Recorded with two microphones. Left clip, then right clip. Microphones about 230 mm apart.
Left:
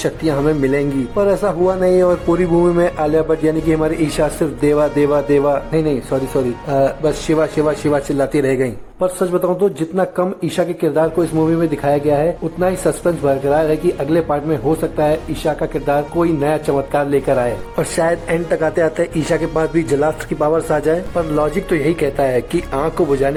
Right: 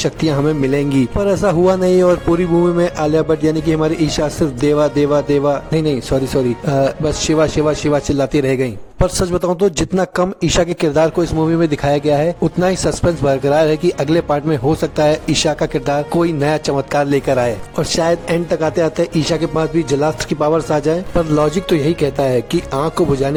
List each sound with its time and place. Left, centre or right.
0.0 s speech: right
6.7 s speech: right